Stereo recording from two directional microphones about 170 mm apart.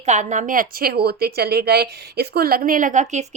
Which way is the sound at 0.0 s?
45° right (ahead or behind).